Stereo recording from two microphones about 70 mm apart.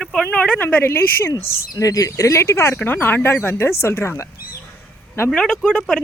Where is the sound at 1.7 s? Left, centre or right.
Left.